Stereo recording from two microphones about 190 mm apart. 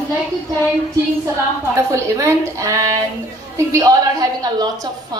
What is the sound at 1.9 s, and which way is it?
A woman's voice, 15° right (ahead or behind).